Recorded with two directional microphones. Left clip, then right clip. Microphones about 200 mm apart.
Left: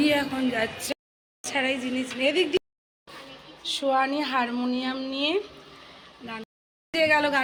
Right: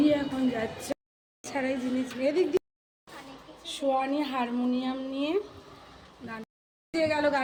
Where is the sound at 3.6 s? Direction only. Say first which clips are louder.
Left 4 dB; centre (ahead or behind).